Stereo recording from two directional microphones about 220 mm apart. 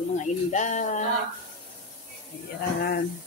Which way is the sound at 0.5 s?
35° left (ahead or behind).